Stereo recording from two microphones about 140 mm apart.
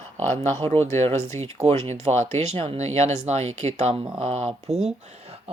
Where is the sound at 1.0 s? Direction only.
55° right (ahead or behind).